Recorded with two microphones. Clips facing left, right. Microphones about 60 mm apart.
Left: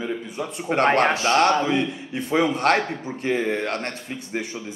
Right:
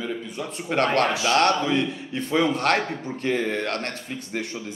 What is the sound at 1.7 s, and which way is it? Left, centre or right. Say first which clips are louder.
Speech: left 1 dB; centre.